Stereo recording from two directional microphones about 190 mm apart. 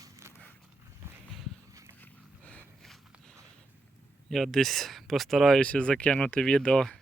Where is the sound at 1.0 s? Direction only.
10° right (ahead or behind).